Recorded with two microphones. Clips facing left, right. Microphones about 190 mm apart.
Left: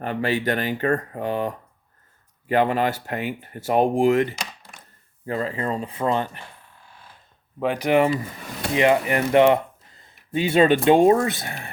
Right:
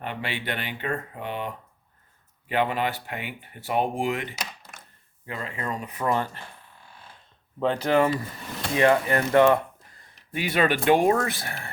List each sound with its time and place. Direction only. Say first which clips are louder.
0.0 s speech: left 9 dB; 40° left (ahead or behind); by 6.4 s 20° left (ahead or behind)
7.6 s speech: left 2 dB; 15° left (ahead or behind)